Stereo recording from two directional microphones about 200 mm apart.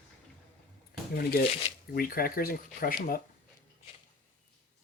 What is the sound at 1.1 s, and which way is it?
Speech, 50° left (ahead or behind).